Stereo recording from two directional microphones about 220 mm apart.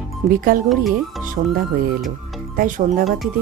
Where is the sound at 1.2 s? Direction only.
35° right (ahead or behind).